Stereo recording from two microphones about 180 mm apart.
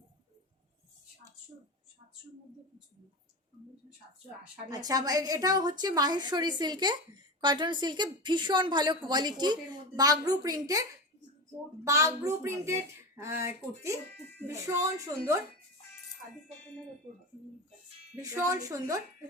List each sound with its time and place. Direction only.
4.7 s a woman's voice: 20° right (ahead or behind)
11.9 s speech: 15° right (ahead or behind)
18.2 s a woman's voice: 20° right (ahead or behind)